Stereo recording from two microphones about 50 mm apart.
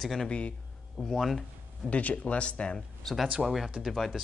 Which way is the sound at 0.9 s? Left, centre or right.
Centre.